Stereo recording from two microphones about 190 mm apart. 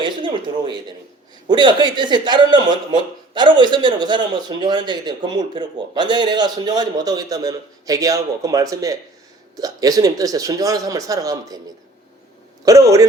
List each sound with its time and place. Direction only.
0.0 s a sound: 25° right (ahead or behind)
1.5 s a man's voice: 25° right (ahead or behind)
12.6 s a man's voice: 20° right (ahead or behind)